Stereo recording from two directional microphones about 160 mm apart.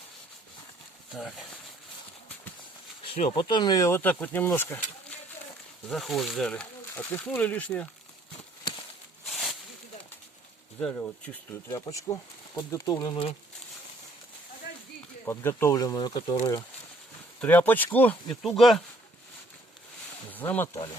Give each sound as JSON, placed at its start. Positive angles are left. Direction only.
{"t": 1.1, "sound": "speech", "side_deg": 0}
{"t": 3.1, "sound": "speech", "side_deg": 30}
{"t": 5.9, "sound": "speech", "side_deg": 0}
{"t": 9.2, "sound": "snake", "side_deg": 0}
{"t": 10.8, "sound": "speech", "side_deg": 5}
{"t": 11.7, "sound": "speech", "side_deg": 20}
{"t": 14.7, "sound": "a sound", "side_deg": 90}
{"t": 15.2, "sound": "speech", "side_deg": 15}
{"t": 17.4, "sound": "speech", "side_deg": 10}
{"t": 20.3, "sound": "speech", "side_deg": 10}